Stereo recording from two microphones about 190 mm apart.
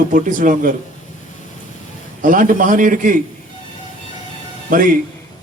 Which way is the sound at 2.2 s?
45° right (ahead or behind).